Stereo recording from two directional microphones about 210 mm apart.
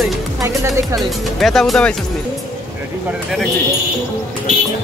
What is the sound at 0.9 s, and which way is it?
Speech, centre (ahead or behind).